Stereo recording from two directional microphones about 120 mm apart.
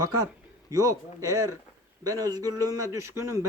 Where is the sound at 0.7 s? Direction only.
30° right (ahead or behind).